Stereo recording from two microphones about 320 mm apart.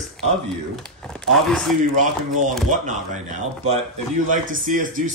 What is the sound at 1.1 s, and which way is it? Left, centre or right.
Speech, centre.